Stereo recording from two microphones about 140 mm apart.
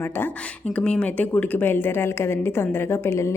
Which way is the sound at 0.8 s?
10° left (ahead or behind).